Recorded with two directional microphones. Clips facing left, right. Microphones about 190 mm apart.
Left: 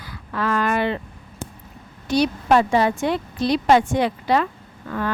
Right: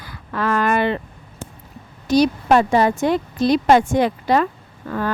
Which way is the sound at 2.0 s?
40° right (ahead or behind).